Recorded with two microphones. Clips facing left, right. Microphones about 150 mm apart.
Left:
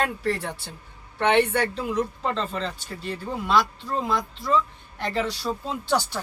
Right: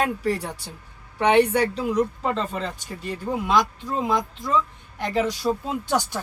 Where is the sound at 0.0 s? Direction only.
10° right (ahead or behind).